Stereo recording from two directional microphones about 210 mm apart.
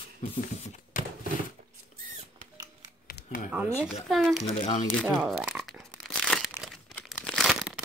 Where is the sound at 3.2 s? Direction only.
55° left (ahead or behind).